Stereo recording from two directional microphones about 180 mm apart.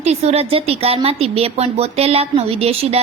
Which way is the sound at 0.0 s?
35° right (ahead or behind).